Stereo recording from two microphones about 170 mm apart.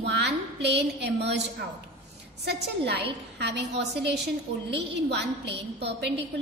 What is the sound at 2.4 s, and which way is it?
A woman's voice, 80° right.